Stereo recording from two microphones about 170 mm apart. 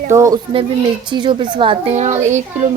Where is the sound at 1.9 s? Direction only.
45° right (ahead or behind).